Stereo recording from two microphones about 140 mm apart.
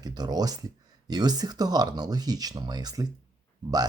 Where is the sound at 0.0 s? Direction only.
30° right (ahead or behind).